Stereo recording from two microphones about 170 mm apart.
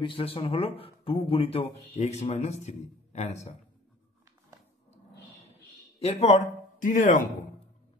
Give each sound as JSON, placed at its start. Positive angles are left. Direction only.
{"t": 0.0, "sound": "speech", "side_deg": 30}
{"t": 5.9, "sound": "speech", "side_deg": 35}